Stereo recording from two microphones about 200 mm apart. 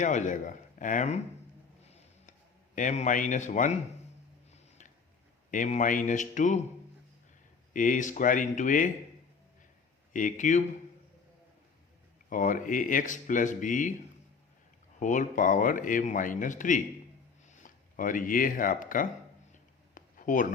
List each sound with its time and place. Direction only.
0.0 s speech: 40° left (ahead or behind)
2.7 s speech: 35° left (ahead or behind)
5.5 s speech: 40° left (ahead or behind)
7.7 s speech: 40° left (ahead or behind)
10.1 s speech: 40° left (ahead or behind)
12.3 s speech: 40° left (ahead or behind)
14.9 s speech: 40° left (ahead or behind)
19.9 s a sound: 40° left (ahead or behind)